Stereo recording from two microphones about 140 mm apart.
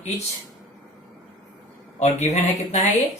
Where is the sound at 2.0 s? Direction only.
55° left (ahead or behind).